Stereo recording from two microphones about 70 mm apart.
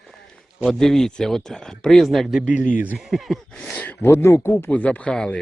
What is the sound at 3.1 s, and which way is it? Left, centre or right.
Speech, centre.